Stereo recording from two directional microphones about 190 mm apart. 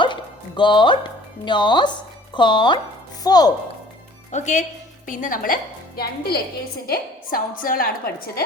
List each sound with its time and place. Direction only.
0.0 s music: 25° left (ahead or behind)
1.5 s speech: 25° left (ahead or behind)
4.3 s a woman's voice: 40° left (ahead or behind)